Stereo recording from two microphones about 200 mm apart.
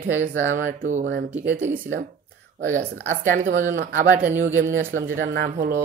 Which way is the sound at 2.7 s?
45° right (ahead or behind).